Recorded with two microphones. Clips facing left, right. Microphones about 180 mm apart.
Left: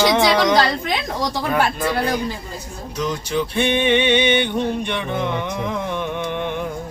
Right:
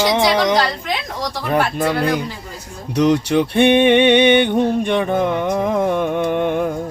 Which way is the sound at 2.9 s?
70° right (ahead or behind).